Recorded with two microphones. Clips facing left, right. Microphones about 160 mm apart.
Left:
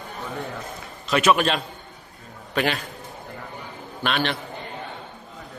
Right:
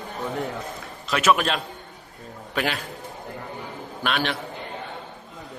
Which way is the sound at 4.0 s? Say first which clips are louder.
Left 1 dB; 5° right (ahead or behind).